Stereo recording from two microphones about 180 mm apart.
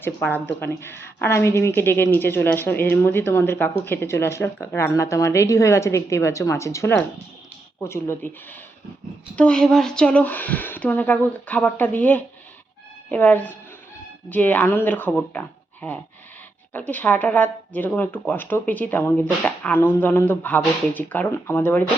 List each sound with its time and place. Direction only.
0.0 s speech: 10° left (ahead or behind)
9.3 s speech: 5° left (ahead or behind)